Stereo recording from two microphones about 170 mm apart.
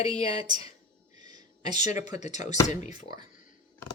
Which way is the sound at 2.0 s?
45° left (ahead or behind).